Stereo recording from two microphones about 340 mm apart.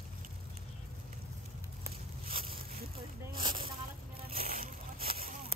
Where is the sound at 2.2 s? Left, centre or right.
Right.